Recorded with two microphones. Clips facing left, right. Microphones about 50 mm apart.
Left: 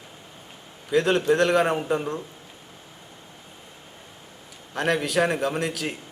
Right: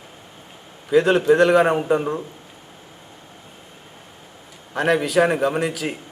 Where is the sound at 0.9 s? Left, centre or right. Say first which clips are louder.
Right 5 dB; centre.